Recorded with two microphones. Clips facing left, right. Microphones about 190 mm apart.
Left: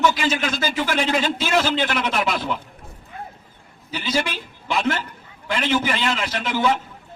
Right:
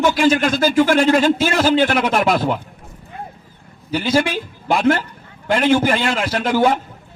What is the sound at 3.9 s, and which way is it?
A man's voice, 50° right (ahead or behind).